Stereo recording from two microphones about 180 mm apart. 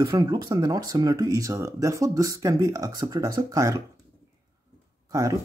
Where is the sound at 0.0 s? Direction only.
20° right (ahead or behind).